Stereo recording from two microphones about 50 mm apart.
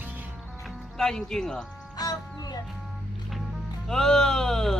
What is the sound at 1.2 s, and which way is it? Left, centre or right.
Speech, centre.